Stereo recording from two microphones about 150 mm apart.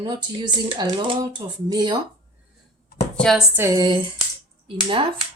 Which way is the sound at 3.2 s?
Centre (ahead or behind).